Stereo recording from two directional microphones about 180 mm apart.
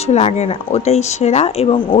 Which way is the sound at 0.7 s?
35° left (ahead or behind).